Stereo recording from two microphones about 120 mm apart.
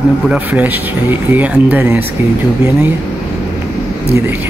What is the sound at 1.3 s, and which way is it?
Speech, 10° right (ahead or behind).